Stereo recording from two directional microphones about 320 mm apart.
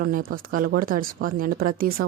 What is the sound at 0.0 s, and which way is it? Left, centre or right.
Speech, right.